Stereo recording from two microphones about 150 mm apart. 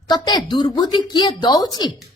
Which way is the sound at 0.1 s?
30° left (ahead or behind).